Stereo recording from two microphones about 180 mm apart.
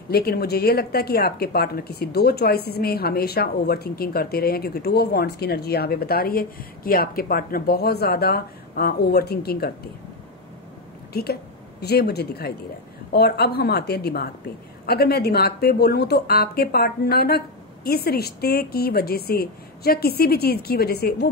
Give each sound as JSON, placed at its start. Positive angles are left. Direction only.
{"t": 0.1, "sound": "a woman's voice", "side_deg": 60}
{"t": 11.8, "sound": "a woman's voice", "side_deg": 60}